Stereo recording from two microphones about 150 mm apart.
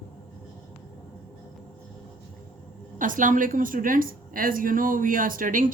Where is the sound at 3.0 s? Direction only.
65° right (ahead or behind).